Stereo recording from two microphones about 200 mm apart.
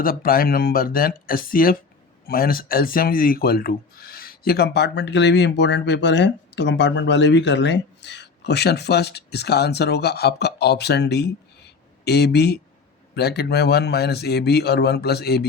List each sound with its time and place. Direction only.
0.0 s speech: 45° left (ahead or behind)